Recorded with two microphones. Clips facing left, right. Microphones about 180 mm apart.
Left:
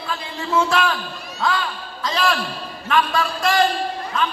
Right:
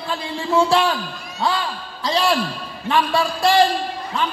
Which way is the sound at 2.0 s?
30° right (ahead or behind).